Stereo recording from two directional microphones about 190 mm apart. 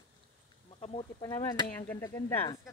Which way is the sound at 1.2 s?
20° left (ahead or behind).